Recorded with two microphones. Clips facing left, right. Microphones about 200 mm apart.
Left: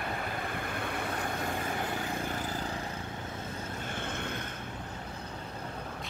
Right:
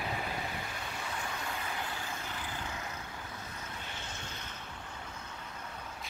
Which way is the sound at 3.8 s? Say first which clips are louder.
Left 8 dB; 55° left (ahead or behind).